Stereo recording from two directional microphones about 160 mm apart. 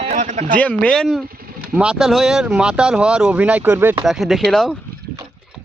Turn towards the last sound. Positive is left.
turn(degrees=0)  # may be behind; listen again after turning